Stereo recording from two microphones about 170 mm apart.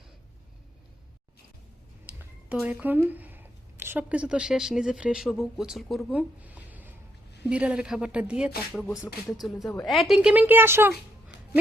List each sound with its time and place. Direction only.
2.0 s a woman's voice: 10° right (ahead or behind)
11.3 s music: 90° left